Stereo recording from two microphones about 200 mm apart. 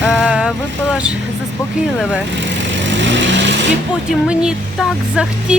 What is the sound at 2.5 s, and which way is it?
Vehicle, 65° right (ahead or behind).